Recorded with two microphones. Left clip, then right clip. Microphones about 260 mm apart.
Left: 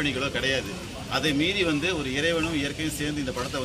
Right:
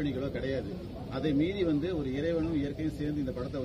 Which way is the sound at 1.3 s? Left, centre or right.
Left.